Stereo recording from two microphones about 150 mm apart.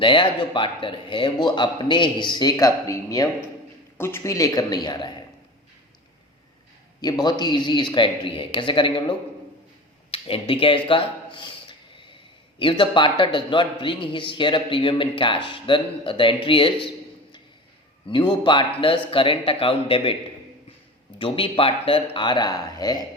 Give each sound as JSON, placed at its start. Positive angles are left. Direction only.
{"t": 0.0, "sound": "a man's voice", "side_deg": 35}
{"t": 7.0, "sound": "a man's voice", "side_deg": 25}
{"t": 12.5, "sound": "a man's voice", "side_deg": 35}
{"t": 18.1, "sound": "a man's voice", "side_deg": 30}
{"t": 21.2, "sound": "a man's voice", "side_deg": 35}